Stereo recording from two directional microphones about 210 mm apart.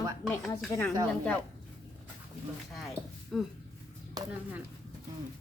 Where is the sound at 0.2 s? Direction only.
Centre (ahead or behind).